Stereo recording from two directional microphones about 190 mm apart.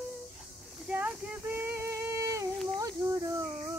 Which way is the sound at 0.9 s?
5° right (ahead or behind).